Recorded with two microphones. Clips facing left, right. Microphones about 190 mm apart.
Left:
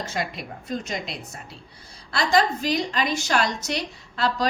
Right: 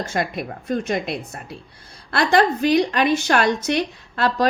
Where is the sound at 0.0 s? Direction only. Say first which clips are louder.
Right 5 dB; 50° right (ahead or behind).